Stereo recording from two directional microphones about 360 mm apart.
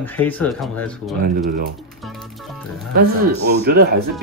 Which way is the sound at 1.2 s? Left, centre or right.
Right.